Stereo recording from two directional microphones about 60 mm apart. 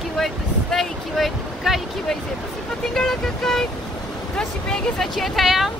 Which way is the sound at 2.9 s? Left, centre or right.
Centre.